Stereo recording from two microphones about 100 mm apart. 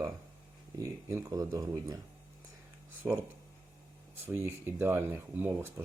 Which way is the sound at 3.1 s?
20° right (ahead or behind).